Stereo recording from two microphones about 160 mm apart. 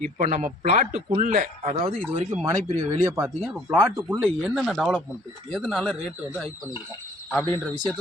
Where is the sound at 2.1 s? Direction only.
25° right (ahead or behind); by 6.5 s 5° left (ahead or behind).